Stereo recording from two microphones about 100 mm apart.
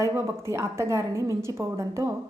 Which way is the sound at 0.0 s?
30° right (ahead or behind).